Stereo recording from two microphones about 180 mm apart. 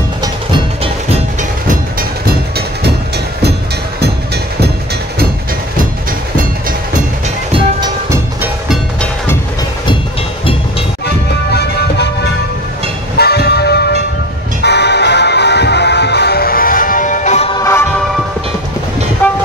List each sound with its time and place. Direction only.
13.2 s music: 65° left (ahead or behind); by 17.5 s 40° left (ahead or behind)
17.6 s music: 15° left (ahead or behind)
19.2 s train: 10° left (ahead or behind)